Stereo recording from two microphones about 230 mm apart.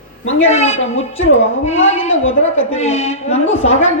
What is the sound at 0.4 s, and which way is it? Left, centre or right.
Speech, left.